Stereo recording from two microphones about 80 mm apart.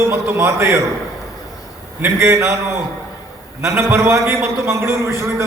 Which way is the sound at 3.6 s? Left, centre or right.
Right.